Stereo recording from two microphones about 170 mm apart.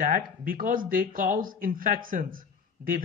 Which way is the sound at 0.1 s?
55° right (ahead or behind).